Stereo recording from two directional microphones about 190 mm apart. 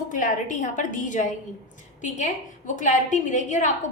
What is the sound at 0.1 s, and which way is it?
A woman's voice, 45° left (ahead or behind).